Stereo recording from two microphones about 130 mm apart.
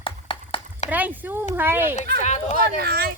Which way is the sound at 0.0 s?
40° left (ahead or behind).